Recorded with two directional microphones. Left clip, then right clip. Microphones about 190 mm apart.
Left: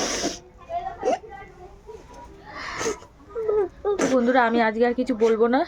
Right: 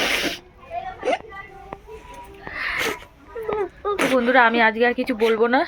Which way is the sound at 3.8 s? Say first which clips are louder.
Right 3 dB; 25° left (ahead or behind).